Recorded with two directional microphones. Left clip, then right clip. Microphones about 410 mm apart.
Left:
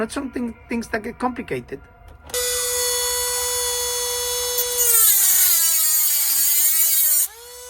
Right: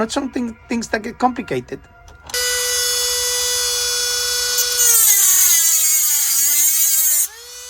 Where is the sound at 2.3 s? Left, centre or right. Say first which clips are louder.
Right 4 dB; centre.